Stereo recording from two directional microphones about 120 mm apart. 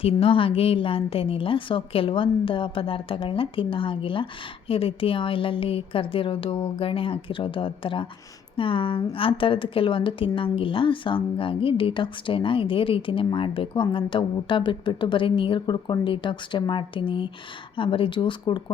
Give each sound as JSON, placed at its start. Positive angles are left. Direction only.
{"t": 0.0, "sound": "a woman's voice", "side_deg": 50}